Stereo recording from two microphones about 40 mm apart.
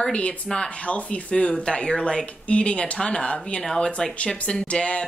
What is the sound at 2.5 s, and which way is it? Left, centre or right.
A woman's voice, left.